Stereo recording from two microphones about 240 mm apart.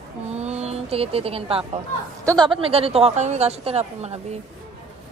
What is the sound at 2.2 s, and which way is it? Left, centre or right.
A woman's voice, centre.